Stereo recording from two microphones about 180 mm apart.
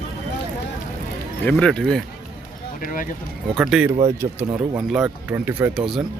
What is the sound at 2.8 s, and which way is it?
Speech, 50° left (ahead or behind).